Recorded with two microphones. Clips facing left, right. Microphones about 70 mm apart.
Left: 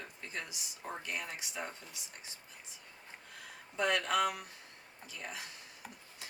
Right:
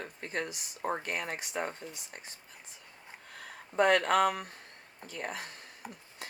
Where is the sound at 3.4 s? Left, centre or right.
Right.